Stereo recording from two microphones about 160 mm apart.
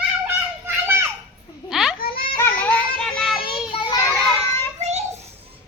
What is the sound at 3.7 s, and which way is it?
Child singing, 30° left (ahead or behind).